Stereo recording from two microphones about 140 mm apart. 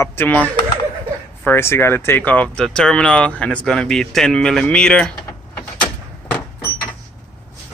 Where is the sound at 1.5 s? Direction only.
15° left (ahead or behind).